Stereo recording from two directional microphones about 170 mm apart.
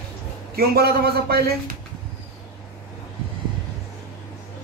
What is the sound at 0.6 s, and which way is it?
Speech, 65° right (ahead or behind).